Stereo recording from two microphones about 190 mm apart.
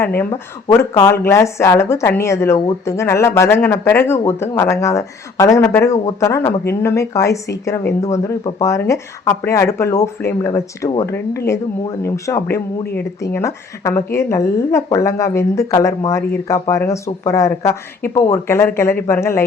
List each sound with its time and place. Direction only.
0.2 s speech: 15° left (ahead or behind)